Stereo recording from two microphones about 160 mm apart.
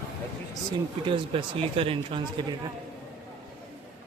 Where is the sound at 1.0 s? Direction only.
30° right (ahead or behind).